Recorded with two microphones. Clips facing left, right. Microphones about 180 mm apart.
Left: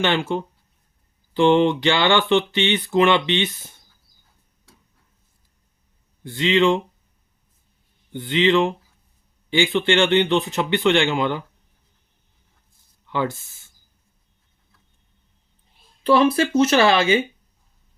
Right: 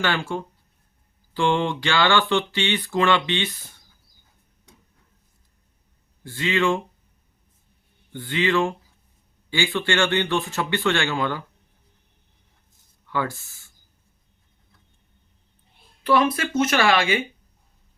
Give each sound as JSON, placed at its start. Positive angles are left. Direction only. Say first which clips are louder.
{"t": 0.0, "sound": "speech", "louder": "left 4 dB", "side_deg": 20}
{"t": 6.2, "sound": "speech", "louder": "left 5 dB", "side_deg": 20}
{"t": 8.1, "sound": "speech", "louder": "left 4 dB", "side_deg": 20}
{"t": 13.1, "sound": "speech", "louder": "left 3 dB", "side_deg": 20}
{"t": 16.0, "sound": "speech", "louder": "left 4 dB", "side_deg": 30}